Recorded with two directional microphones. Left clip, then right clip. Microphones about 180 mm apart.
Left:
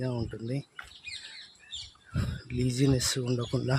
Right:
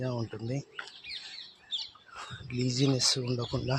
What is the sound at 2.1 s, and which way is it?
Speech, 25° left (ahead or behind).